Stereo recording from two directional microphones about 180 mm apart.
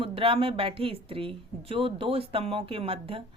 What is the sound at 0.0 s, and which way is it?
A woman's voice, 30° right (ahead or behind).